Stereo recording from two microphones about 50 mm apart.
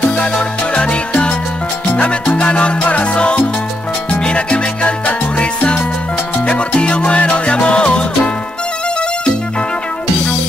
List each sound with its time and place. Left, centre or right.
0.1 s music: left
2.0 s salsa music: left
4.1 s music: centre
6.4 s salsa music: left